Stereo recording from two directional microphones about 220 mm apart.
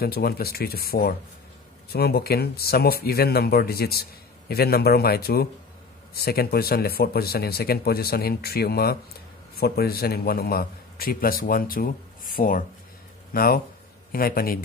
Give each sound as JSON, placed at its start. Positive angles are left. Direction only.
{"t": 0.0, "sound": "a man's voice", "side_deg": 45}